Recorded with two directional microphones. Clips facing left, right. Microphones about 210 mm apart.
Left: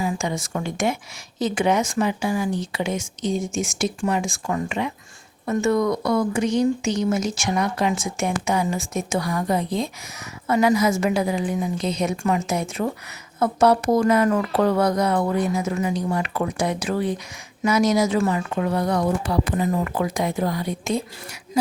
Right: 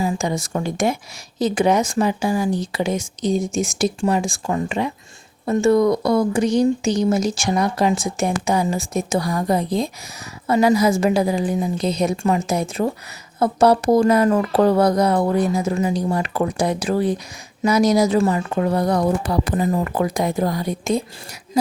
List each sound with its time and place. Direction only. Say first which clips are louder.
0.0 s speech: right 3 dB; 35° right (ahead or behind)